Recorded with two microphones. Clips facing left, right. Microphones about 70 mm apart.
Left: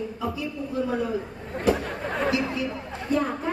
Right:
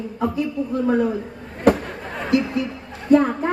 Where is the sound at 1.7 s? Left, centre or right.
Right.